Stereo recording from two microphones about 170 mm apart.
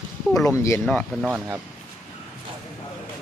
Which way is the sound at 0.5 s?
15° left (ahead or behind).